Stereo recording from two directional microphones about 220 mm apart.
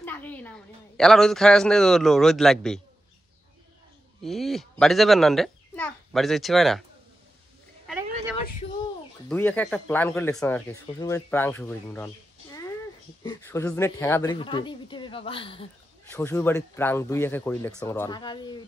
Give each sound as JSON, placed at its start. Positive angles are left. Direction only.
{"t": 0.0, "sound": "a woman's voice", "side_deg": 10}
{"t": 4.2, "sound": "a child's voice", "side_deg": 0}
{"t": 7.8, "sound": "a sound", "side_deg": -5}
{"t": 9.3, "sound": "speech", "side_deg": 10}
{"t": 13.4, "sound": "a woman's voice", "side_deg": 10}
{"t": 16.1, "sound": "speech", "side_deg": 10}